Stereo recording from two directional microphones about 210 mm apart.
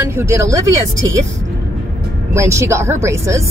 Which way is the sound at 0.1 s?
15° right (ahead or behind).